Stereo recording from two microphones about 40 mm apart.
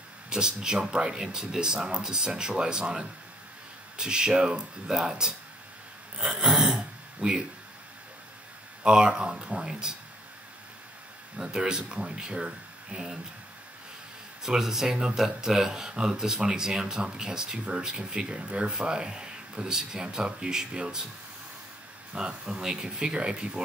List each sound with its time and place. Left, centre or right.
0.3 s speech: centre
6.4 s a sound: centre
6.8 s a sound: centre
8.8 s speech: centre
11.4 s speech: centre
14.4 s speech: centre
22.1 s speech: centre